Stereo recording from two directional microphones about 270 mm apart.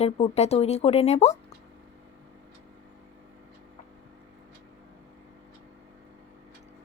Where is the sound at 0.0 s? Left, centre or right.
Left.